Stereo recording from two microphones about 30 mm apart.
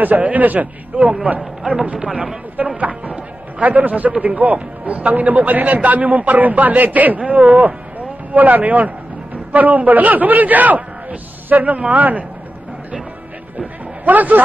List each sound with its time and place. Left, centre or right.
0.0 s a man's voice: right
0.9 s speech: right
2.8 s music: right
3.6 s a man's voice: right
7.2 s a man's voice: right
14.0 s a man's voice: right